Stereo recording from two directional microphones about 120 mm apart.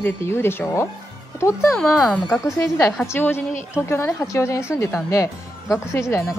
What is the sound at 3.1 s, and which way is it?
A woman's voice, 20° left (ahead or behind).